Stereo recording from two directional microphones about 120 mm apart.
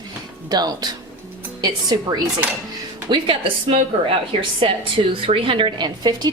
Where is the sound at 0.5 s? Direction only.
35° right (ahead or behind).